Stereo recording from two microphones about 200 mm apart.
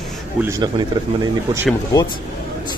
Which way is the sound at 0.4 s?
15° right (ahead or behind).